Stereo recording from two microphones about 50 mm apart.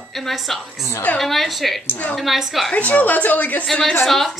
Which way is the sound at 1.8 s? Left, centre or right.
Left.